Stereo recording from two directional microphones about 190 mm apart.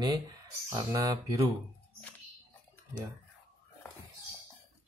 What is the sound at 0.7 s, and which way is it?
Speech, 20° right (ahead or behind).